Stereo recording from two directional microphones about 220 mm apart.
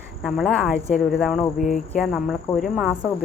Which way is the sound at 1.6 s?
35° left (ahead or behind).